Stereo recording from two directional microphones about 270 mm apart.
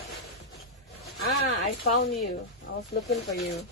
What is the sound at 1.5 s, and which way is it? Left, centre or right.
Speech, left.